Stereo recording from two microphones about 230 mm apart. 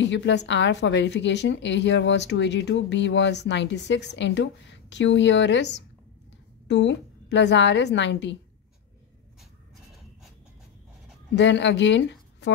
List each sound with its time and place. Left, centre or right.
0.0 s a woman's voice: left
6.7 s a woman's voice: left
11.3 s a woman's voice: left